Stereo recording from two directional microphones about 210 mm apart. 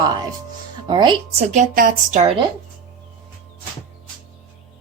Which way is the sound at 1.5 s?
40° right (ahead or behind).